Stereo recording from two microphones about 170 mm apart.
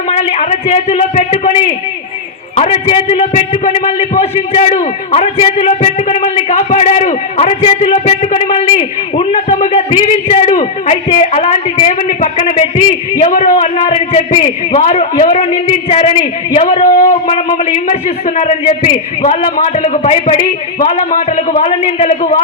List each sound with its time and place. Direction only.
0.1 s a man's voice: 40° left (ahead or behind)